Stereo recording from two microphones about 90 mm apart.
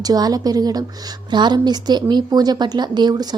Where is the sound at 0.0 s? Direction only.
45° right (ahead or behind).